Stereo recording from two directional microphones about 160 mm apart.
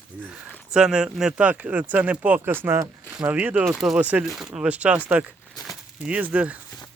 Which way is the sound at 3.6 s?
Centre (ahead or behind).